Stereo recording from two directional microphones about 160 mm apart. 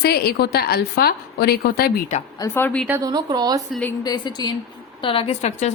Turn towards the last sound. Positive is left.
turn(degrees=45)  # may be behind; listen again after turning